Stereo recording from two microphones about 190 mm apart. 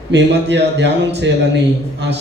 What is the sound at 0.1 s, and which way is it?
A man's voice, 65° right (ahead or behind).